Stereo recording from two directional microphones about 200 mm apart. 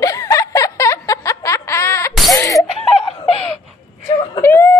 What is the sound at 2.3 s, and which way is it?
Laughter, 15° left (ahead or behind).